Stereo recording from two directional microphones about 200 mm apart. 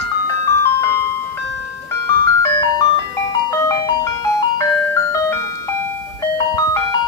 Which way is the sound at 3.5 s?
15° left (ahead or behind).